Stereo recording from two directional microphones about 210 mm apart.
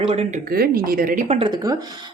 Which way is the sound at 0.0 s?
30° right (ahead or behind).